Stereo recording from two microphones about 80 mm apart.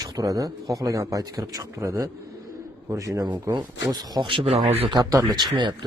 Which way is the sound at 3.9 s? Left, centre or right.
Right.